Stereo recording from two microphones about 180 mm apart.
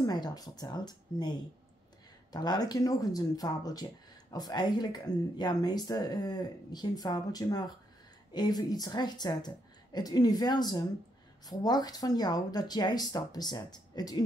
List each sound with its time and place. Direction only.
0.0 s speech: 20° left (ahead or behind)